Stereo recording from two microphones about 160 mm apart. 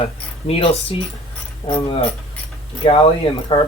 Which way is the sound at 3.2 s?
35° left (ahead or behind).